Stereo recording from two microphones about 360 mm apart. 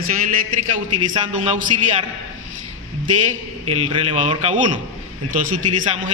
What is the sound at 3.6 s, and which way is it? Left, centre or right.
A man's voice, centre.